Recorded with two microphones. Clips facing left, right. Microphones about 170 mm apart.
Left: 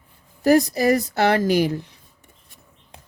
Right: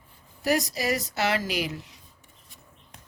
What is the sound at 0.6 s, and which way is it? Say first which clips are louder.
Speech: left 9 dB; 55° left (ahead or behind).